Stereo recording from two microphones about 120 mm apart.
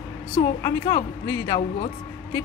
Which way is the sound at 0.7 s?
30° left (ahead or behind).